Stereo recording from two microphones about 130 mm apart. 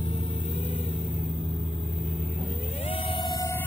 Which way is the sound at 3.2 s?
25° left (ahead or behind).